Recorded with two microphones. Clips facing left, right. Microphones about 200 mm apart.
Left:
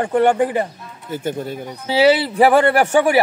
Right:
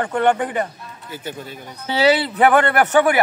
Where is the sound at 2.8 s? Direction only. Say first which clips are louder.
Even; 10° left (ahead or behind).